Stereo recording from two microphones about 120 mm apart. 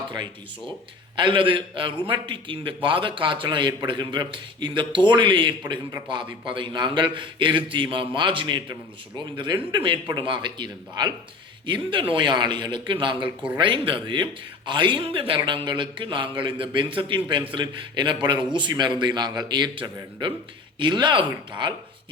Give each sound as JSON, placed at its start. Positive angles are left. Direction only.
{"t": 0.1, "sound": "a man's voice", "side_deg": -40}
{"t": 13.2, "sound": "speech", "side_deg": -10}
{"t": 13.6, "sound": "a man's voice", "side_deg": -45}